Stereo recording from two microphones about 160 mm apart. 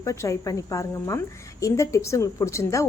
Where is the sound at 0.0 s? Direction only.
20° left (ahead or behind).